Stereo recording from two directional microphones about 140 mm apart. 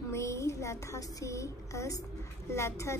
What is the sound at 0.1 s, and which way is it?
A woman's voice, 20° left (ahead or behind).